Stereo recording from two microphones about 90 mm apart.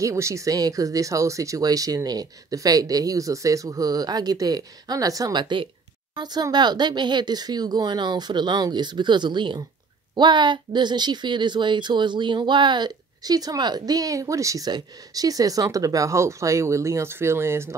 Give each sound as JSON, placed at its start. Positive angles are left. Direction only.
{"t": 0.0, "sound": "speech", "side_deg": -35}